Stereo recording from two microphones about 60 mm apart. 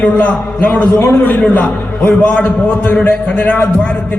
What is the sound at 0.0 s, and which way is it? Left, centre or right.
A man's voice, left.